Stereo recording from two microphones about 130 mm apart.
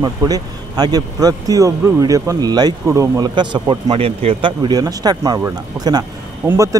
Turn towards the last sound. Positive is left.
turn(degrees=-15)  # may be behind; listen again after turning